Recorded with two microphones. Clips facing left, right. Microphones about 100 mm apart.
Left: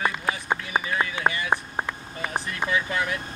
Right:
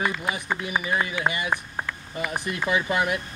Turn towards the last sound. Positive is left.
turn(degrees=-15)  # may be behind; listen again after turning